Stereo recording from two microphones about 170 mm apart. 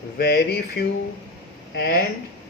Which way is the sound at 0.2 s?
65° left (ahead or behind).